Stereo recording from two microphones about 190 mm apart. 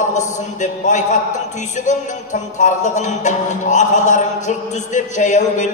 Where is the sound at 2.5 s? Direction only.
40° left (ahead or behind).